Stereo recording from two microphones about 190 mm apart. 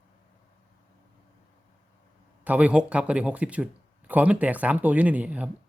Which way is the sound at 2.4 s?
5° right (ahead or behind).